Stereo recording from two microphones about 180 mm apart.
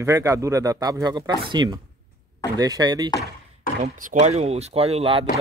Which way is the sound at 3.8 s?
45° right (ahead or behind).